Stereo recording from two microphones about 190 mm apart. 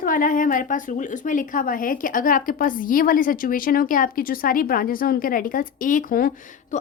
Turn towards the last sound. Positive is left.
turn(degrees=40)  # may be behind; listen again after turning